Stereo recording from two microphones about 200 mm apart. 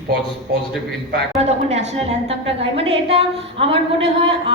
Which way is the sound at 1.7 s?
30° right (ahead or behind).